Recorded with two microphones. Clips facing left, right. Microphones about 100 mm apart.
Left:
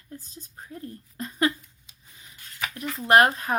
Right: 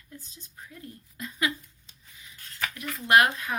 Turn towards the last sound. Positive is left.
turn(degrees=40)  # may be behind; listen again after turning